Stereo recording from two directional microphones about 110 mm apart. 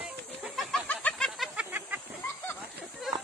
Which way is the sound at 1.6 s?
10° right (ahead or behind).